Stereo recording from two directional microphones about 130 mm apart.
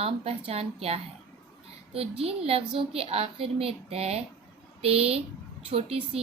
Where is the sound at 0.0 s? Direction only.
50° right (ahead or behind).